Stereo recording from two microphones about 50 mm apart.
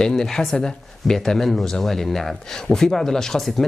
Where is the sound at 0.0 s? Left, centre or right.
Centre.